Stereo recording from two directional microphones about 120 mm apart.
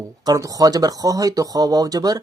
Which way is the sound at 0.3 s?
30° right (ahead or behind).